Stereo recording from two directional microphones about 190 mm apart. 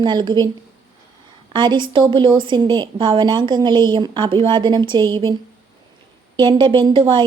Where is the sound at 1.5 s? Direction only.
25° right (ahead or behind).